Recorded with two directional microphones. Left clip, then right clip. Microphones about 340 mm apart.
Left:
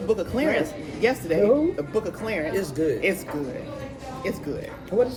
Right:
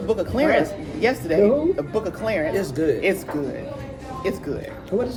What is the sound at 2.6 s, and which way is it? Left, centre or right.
Speech, centre.